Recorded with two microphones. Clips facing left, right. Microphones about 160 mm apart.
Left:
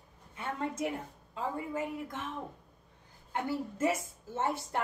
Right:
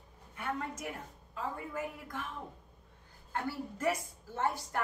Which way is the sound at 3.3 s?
20° left (ahead or behind).